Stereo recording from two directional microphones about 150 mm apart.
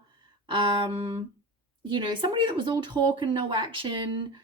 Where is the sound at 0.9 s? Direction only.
35° right (ahead or behind).